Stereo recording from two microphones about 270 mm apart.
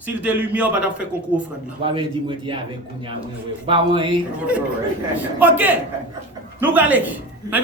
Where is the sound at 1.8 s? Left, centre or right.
Centre.